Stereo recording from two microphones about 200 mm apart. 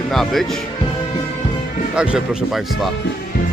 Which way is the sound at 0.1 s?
Centre (ahead or behind).